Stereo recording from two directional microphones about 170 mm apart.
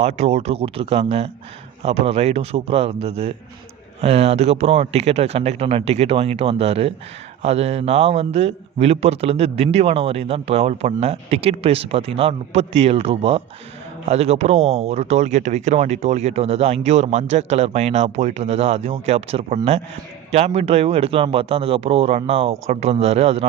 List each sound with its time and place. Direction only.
0.0 s speech: 40° right (ahead or behind)